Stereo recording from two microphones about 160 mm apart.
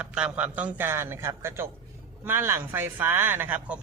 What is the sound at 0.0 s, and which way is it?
Speech, 10° right (ahead or behind).